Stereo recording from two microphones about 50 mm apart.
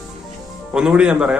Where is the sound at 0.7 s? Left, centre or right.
Centre.